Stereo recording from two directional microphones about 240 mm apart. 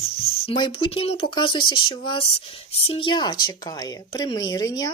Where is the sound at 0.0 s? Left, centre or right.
Left.